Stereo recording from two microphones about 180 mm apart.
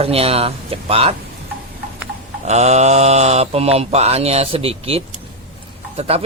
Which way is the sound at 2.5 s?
40° right (ahead or behind).